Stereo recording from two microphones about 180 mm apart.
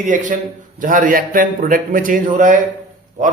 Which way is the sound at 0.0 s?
45° right (ahead or behind).